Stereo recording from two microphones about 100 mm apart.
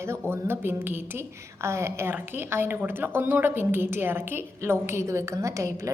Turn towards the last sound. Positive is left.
turn(degrees=-30)  # may be behind; listen again after turning